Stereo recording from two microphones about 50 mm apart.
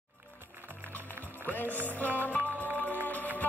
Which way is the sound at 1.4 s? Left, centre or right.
Left.